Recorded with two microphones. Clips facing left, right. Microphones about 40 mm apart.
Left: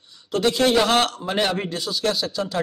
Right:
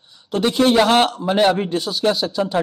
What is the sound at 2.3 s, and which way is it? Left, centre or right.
Speech, right.